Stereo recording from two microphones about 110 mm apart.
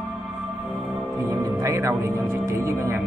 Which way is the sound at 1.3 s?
25° right (ahead or behind).